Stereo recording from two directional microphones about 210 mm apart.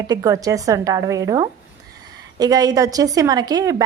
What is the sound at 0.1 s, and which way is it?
A woman's voice, 15° right (ahead or behind).